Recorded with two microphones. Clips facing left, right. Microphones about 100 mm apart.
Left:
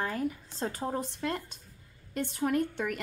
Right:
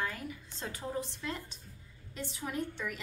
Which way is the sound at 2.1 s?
55° left (ahead or behind).